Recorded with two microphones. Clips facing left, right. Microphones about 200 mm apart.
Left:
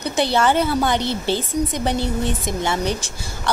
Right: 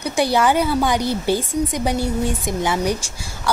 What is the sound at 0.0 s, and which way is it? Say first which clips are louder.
A woman's voice: right 1 dB; 10° right (ahead or behind).